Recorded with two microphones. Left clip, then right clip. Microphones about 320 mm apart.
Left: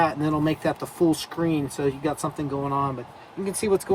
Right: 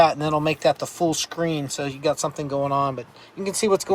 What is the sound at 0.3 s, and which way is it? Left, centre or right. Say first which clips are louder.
Speech: right 4 dB; centre.